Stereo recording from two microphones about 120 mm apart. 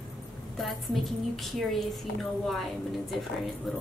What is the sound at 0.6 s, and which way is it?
A woman's voice, centre (ahead or behind).